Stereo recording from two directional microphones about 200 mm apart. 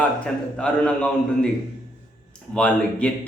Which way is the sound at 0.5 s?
5° left (ahead or behind).